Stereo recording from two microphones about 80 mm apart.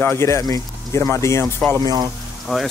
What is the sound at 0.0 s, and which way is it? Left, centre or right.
Speech, left.